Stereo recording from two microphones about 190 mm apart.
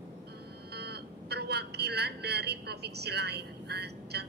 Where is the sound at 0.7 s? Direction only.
60° right (ahead or behind).